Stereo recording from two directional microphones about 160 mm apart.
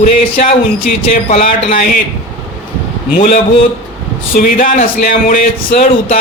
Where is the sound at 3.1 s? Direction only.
55° left (ahead or behind).